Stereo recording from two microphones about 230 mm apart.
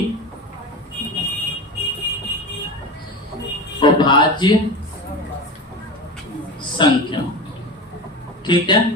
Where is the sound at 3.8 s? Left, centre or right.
Left.